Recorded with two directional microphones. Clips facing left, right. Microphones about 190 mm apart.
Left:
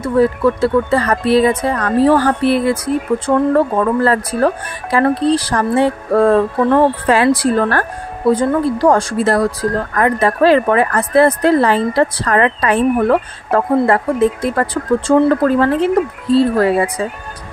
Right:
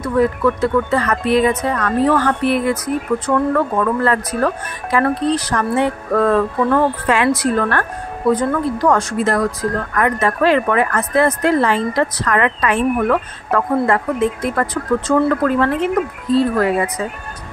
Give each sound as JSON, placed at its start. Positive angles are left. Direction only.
{"t": 0.0, "sound": "speech", "side_deg": 30}